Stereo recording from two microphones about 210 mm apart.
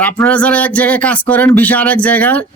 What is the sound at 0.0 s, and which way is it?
Speech, 5° left (ahead or behind).